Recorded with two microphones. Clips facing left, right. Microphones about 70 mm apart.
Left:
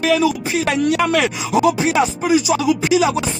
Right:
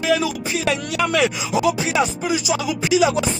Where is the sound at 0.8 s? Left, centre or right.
Left.